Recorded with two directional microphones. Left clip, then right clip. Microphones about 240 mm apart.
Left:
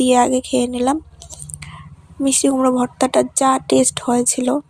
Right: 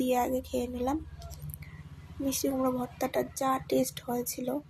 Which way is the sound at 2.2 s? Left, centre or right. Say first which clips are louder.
Left 14 dB; left.